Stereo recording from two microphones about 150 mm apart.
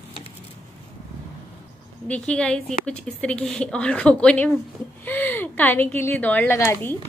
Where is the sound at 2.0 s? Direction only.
10° left (ahead or behind).